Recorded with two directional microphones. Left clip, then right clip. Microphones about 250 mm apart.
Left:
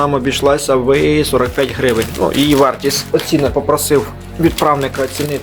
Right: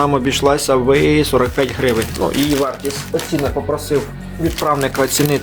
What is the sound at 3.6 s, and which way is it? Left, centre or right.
Speech, left.